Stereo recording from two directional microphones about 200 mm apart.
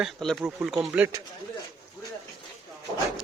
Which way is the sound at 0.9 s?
15° right (ahead or behind).